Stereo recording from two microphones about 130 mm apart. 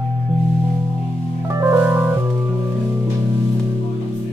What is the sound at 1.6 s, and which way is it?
Organ, 20° right (ahead or behind).